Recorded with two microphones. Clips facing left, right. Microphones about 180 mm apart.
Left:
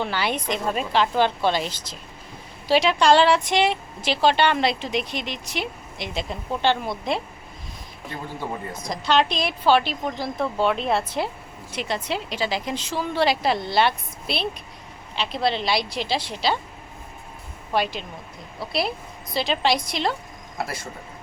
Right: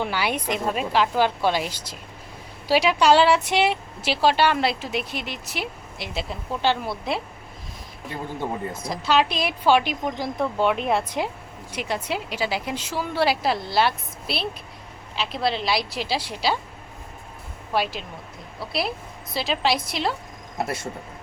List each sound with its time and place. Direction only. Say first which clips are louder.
0.0 s speech: even; 10° right (ahead or behind)
8.1 s a man's voice: right 2 dB; 20° right (ahead or behind)
8.8 s a woman's voice: left 1 dB; 5° right (ahead or behind)
17.7 s a woman's voice: left 1 dB; 5° right (ahead or behind)
20.6 s a man's voice: right 3 dB; 25° right (ahead or behind)